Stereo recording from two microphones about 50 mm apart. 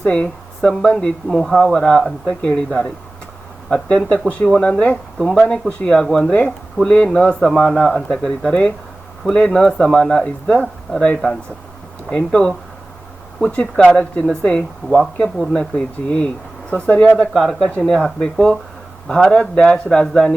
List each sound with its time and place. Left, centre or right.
0.0 s speech: centre
1.3 s speech: centre
1.7 s speech: centre
5.2 s speech: centre
5.5 s speech: centre
6.1 s speech: centre
6.9 s speech: centre
7.3 s speech: centre
7.8 s speech: centre
8.1 s speech: centre
8.4 s speech: centre
12.1 s speech: centre
17.3 s speech: centre
17.7 s speech: centre